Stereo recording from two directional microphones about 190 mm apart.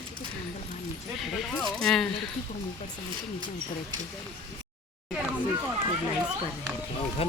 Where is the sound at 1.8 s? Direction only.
5° left (ahead or behind).